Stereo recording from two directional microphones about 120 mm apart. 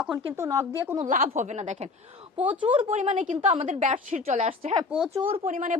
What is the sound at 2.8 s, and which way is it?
Speech, 70° right (ahead or behind).